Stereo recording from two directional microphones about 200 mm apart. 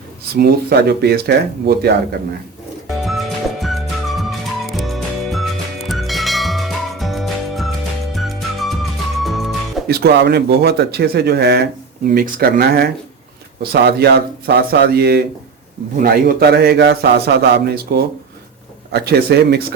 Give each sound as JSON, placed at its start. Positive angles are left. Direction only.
{"t": 0.3, "sound": "speech", "side_deg": -50}
{"t": 3.0, "sound": "music", "side_deg": 0}
{"t": 9.8, "sound": "speech", "side_deg": -55}